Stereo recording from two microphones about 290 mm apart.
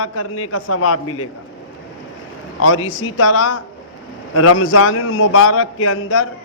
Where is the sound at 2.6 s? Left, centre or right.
Left.